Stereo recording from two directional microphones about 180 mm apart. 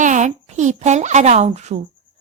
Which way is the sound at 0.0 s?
45° right (ahead or behind).